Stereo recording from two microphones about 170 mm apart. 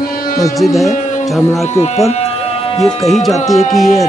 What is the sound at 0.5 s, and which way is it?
Speech, centre (ahead or behind).